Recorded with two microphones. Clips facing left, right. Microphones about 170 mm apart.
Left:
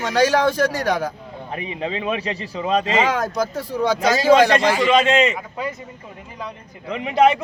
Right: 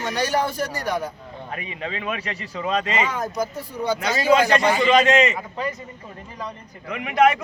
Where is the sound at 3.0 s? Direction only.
90° left.